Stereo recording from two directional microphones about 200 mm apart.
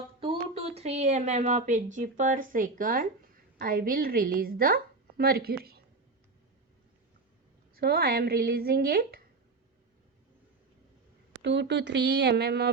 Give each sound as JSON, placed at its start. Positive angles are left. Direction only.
{"t": 0.2, "sound": "a sound", "side_deg": -30}
{"t": 0.8, "sound": "a woman's voice", "side_deg": -35}
{"t": 7.8, "sound": "a woman's voice", "side_deg": -50}
{"t": 11.4, "sound": "speech", "side_deg": -60}